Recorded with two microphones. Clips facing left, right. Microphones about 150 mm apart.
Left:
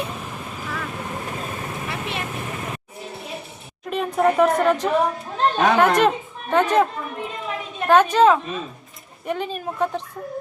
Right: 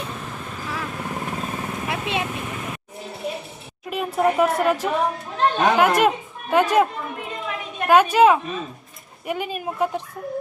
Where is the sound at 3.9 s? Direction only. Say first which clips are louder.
Left 1 dB; 5° right (ahead or behind).